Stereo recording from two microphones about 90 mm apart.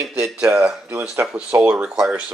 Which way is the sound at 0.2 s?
10° right (ahead or behind).